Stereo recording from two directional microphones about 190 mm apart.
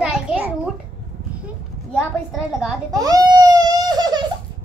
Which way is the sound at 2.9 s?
20° right (ahead or behind).